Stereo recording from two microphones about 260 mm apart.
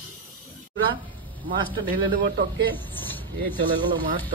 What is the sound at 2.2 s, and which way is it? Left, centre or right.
Speech, right.